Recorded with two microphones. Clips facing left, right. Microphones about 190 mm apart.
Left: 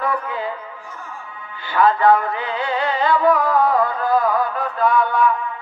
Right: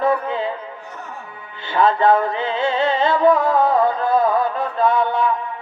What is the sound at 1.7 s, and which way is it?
Music, 25° right (ahead or behind).